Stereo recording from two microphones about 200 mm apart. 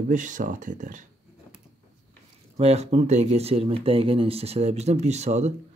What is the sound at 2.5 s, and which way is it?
Speech, 30° right (ahead or behind).